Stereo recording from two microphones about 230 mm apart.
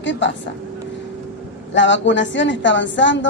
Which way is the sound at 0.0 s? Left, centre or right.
Left.